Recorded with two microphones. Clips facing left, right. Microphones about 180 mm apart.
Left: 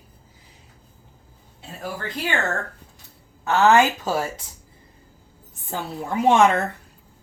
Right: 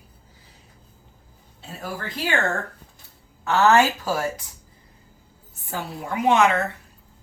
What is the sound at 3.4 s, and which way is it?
Speech, 15° left (ahead or behind).